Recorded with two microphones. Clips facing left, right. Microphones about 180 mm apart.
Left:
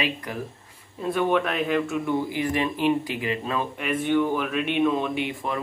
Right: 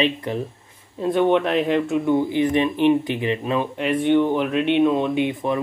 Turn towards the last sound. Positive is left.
turn(degrees=-20)  # may be behind; listen again after turning